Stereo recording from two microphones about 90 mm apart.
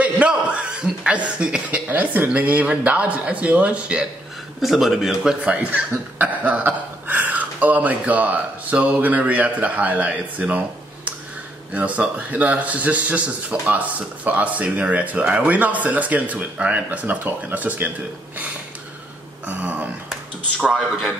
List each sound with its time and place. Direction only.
0.0 s a man's voice: 15° right (ahead or behind)
4.6 s speech: centre (ahead or behind); by 10.6 s 15° right (ahead or behind)
11.7 s speech: 15° right (ahead or behind)
19.4 s speech: 15° right (ahead or behind)
20.6 s a man's voice: centre (ahead or behind)